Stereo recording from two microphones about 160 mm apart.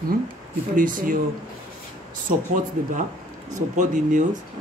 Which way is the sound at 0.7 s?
60° right (ahead or behind).